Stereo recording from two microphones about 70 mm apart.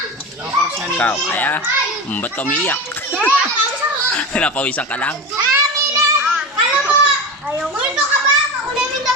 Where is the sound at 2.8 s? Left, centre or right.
Left.